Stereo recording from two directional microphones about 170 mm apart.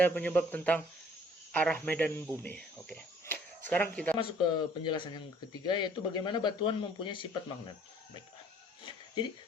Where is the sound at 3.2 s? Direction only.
10° left (ahead or behind).